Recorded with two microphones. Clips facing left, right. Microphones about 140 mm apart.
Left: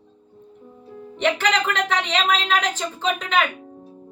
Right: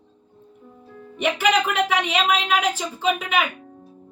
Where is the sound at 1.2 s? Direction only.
10° right (ahead or behind).